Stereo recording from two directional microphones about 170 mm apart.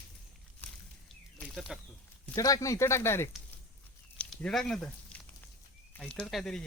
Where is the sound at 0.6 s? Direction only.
10° left (ahead or behind).